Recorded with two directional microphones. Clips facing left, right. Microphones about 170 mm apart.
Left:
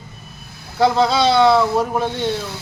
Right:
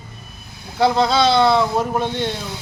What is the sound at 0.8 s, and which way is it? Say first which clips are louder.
Speech: left 1 dB; 5° left (ahead or behind).